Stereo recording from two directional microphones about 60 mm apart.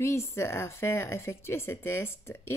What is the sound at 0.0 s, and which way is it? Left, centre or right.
A woman's voice, left.